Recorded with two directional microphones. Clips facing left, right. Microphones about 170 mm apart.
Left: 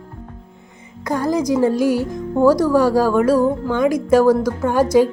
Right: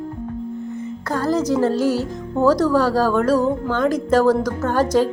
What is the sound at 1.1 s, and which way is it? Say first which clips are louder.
Speech: left 1 dB; 15° left (ahead or behind).